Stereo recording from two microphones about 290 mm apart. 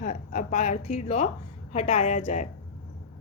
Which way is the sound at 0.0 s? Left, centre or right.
Left.